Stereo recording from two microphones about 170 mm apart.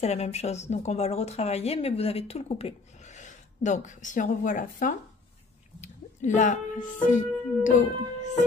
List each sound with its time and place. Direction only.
0.0 s a woman's voice: 40° left (ahead or behind)